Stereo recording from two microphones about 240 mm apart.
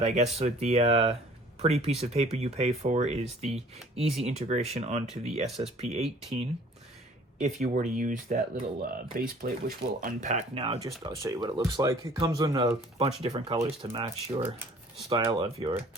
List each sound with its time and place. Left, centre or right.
0.0 s speech: right
4.2 s speech: right
7.3 s speech: right